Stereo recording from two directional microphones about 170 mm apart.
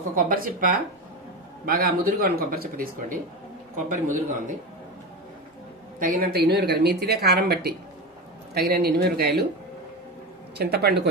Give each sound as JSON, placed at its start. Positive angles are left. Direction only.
{"t": 0.1, "sound": "speech", "side_deg": -55}
{"t": 3.7, "sound": "a man's voice", "side_deg": -50}
{"t": 5.9, "sound": "a woman's voice", "side_deg": -60}
{"t": 10.6, "sound": "a woman's voice", "side_deg": -70}